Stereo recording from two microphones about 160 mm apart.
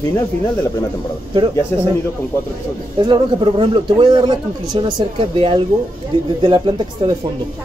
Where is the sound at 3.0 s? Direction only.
25° right (ahead or behind).